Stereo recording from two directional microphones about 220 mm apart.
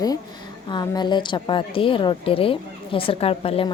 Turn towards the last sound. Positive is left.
turn(degrees=25)  # may be behind; listen again after turning